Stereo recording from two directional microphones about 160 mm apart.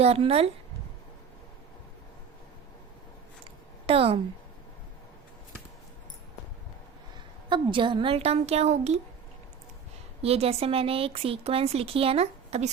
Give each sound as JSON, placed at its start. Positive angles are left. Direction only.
{"t": 0.0, "sound": "speech", "side_deg": -40}
{"t": 3.4, "sound": "a sound", "side_deg": -35}
{"t": 7.5, "sound": "speech", "side_deg": -30}
{"t": 10.2, "sound": "speech", "side_deg": -40}